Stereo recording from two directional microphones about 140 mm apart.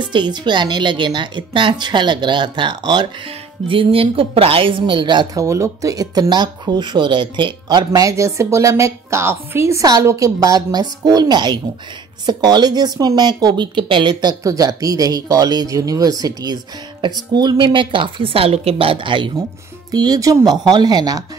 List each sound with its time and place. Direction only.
0.0 s a woman's voice: 35° right (ahead or behind)